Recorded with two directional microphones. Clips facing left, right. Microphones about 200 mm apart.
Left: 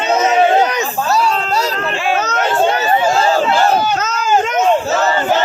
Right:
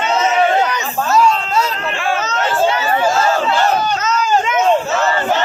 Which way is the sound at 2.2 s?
50° left (ahead or behind).